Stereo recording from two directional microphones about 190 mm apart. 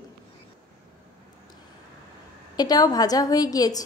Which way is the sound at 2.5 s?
20° left (ahead or behind).